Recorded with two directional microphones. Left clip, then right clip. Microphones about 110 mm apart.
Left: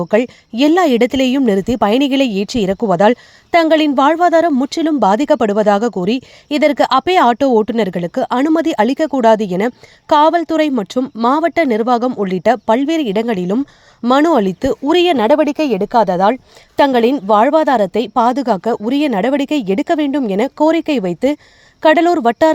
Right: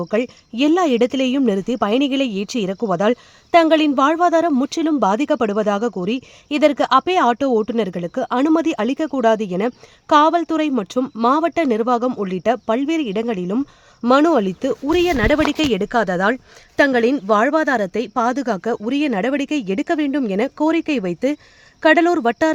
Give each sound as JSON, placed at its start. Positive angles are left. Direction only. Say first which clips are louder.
{"t": 0.1, "sound": "speech", "louder": "left 8 dB", "side_deg": 45}
{"t": 3.5, "sound": "speech", "louder": "left 2 dB", "side_deg": 35}
{"t": 15.4, "sound": "a woman's voice", "louder": "left 3 dB", "side_deg": -5}
{"t": 15.8, "sound": "speech", "louder": "left 6 dB", "side_deg": 15}